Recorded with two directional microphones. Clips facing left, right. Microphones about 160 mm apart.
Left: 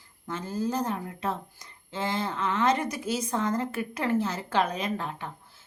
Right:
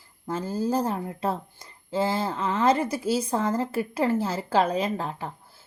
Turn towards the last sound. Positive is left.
turn(degrees=-35)  # may be behind; listen again after turning